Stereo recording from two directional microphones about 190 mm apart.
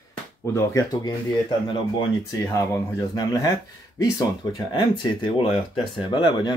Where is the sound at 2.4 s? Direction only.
15° left (ahead or behind).